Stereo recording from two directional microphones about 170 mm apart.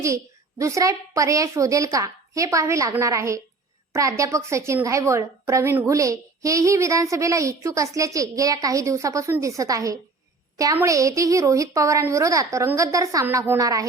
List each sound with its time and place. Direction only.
0.6 s a woman's voice: 20° right (ahead or behind)